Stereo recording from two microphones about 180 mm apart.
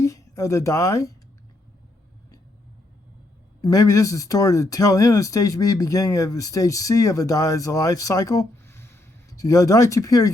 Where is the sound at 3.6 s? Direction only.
20° left (ahead or behind).